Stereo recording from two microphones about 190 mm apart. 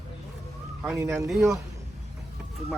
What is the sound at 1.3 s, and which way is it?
Speech, centre (ahead or behind).